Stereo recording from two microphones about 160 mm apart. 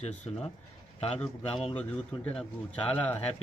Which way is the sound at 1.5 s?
35° left (ahead or behind).